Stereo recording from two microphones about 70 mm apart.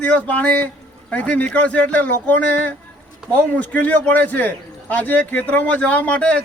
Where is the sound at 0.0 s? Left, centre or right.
Centre.